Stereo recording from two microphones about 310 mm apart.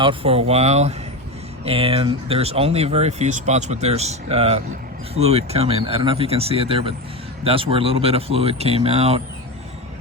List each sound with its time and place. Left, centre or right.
0.0 s speech: centre